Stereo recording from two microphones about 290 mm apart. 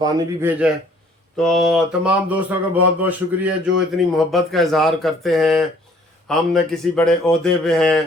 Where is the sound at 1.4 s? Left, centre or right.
Centre.